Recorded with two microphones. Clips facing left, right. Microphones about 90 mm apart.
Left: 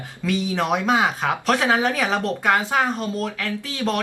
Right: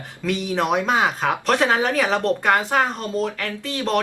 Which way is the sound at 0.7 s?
Centre (ahead or behind).